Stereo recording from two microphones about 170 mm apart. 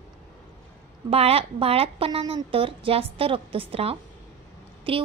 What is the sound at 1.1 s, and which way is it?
A woman's voice, 35° right (ahead or behind).